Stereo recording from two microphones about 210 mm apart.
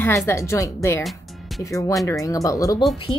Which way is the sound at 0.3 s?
15° left (ahead or behind).